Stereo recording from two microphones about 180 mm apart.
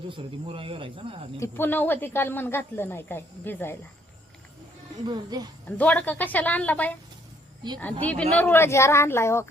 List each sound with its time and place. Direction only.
0.1 s speech: 30° right (ahead or behind)
1.4 s speech: 10° left (ahead or behind)
5.0 s speech: 25° right (ahead or behind)
5.7 s speech: 10° left (ahead or behind)
8.0 s speech: 10° left (ahead or behind)